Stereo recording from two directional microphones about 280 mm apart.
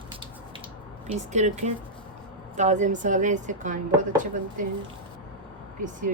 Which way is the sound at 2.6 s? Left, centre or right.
Right.